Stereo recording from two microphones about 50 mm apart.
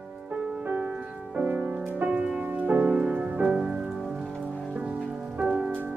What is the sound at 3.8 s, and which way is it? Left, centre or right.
Music, centre.